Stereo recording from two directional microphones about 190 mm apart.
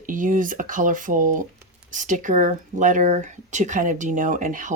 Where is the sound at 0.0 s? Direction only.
45° right (ahead or behind).